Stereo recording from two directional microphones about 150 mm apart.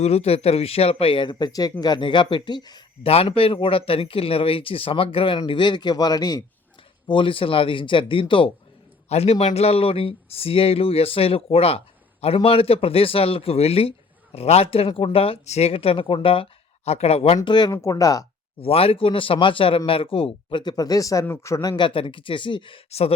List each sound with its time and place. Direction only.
0.0 s speech: 45° left (ahead or behind)
3.1 s speech: 40° left (ahead or behind)
17.4 s speech: 30° left (ahead or behind)
18.6 s speech: 40° left (ahead or behind)